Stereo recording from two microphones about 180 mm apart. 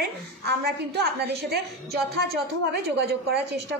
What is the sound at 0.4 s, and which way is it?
A woman's voice, 65° right (ahead or behind).